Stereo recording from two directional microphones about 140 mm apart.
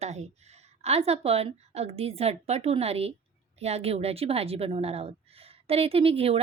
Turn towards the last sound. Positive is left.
turn(degrees=-45)  # may be behind; listen again after turning